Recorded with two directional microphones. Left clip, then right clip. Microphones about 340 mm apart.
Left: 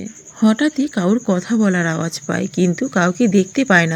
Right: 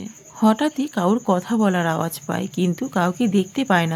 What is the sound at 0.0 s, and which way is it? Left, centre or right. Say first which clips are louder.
Speech: left 1 dB; centre.